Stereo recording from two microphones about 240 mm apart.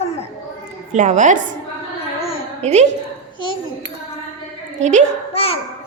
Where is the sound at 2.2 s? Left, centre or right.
Left.